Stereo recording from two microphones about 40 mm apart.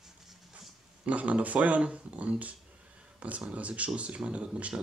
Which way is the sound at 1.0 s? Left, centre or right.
Right.